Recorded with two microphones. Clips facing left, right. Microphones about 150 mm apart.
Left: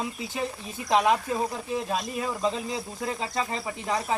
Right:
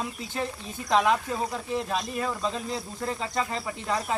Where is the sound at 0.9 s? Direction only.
10° left (ahead or behind).